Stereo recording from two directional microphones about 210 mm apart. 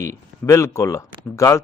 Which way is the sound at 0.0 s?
15° left (ahead or behind).